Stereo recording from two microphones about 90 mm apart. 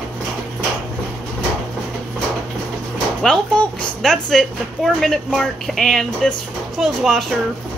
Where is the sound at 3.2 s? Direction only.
5° left (ahead or behind).